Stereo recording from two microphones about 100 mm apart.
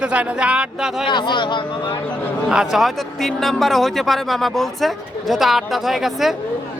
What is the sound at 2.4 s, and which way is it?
A man's voice, centre (ahead or behind).